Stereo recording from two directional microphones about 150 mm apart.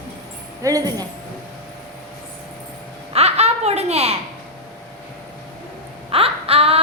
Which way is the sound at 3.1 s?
45° right (ahead or behind).